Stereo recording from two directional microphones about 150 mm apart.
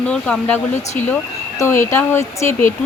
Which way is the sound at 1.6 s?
20° left (ahead or behind).